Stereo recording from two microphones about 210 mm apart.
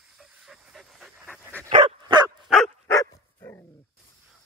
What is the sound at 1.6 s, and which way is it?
Dog, 25° right (ahead or behind).